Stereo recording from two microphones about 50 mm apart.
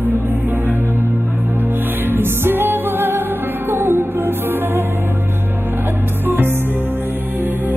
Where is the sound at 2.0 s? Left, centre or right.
Right.